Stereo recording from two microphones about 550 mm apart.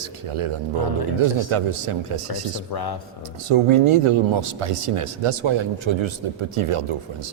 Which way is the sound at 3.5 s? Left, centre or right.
Right.